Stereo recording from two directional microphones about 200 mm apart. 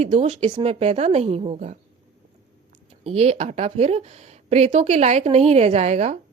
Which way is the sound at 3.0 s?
30° right (ahead or behind).